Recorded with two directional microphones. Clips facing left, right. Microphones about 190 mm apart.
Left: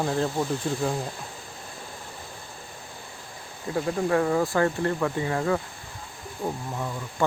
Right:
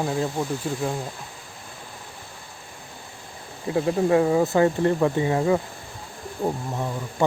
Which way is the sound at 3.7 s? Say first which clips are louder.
Right 4 dB; 20° right (ahead or behind).